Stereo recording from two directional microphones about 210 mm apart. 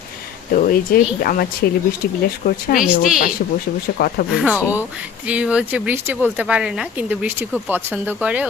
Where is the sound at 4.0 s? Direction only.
45° left (ahead or behind).